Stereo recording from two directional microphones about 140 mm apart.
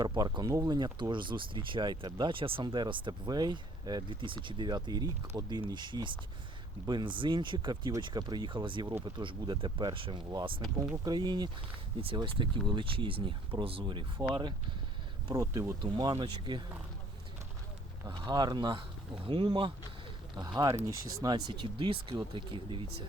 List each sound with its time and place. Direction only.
0.0 s speech: 30° right (ahead or behind)
18.0 s speech: 30° right (ahead or behind)